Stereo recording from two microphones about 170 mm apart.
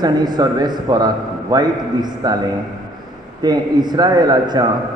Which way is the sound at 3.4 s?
25° right (ahead or behind).